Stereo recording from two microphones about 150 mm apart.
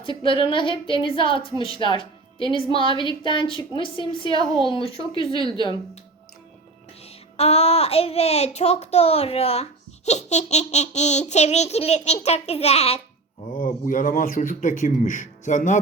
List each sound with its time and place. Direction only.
0.0 s a woman's voice: 35° left (ahead or behind)
7.3 s speech: 45° left (ahead or behind)
13.5 s a man's voice: 65° left (ahead or behind)